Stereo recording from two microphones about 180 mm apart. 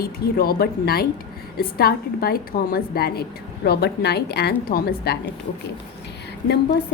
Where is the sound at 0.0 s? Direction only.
55° left (ahead or behind).